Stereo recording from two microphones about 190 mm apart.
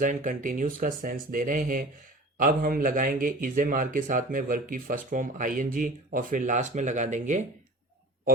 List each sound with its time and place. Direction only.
0.0 s speech: 45° right (ahead or behind)